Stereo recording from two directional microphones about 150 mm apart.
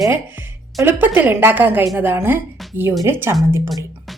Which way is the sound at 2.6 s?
Centre (ahead or behind).